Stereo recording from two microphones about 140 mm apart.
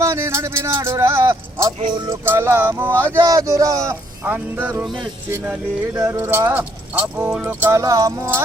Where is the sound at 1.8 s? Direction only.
30° right (ahead or behind).